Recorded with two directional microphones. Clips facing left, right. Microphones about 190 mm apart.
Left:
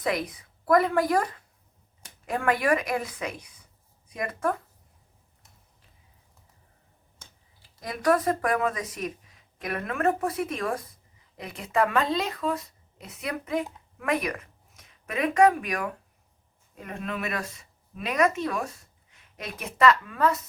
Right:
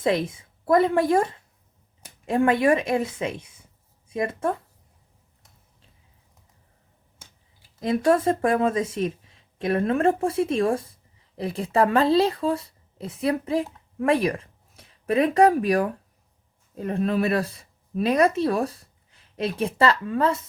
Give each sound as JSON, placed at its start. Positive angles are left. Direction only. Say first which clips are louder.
{"t": 0.0, "sound": "a woman's voice", "louder": "right 5 dB", "side_deg": -25}
{"t": 7.8, "sound": "speech", "louder": "right 4 dB", "side_deg": -25}